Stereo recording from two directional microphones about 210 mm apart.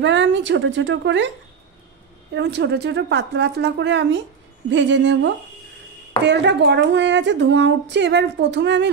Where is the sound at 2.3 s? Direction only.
55° right (ahead or behind).